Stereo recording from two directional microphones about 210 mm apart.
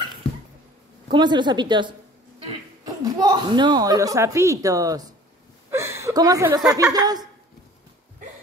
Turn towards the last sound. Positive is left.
turn(degrees=-20)  # may be behind; listen again after turning